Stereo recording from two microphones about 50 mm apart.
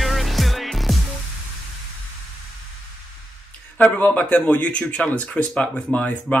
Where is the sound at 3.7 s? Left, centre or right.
Left.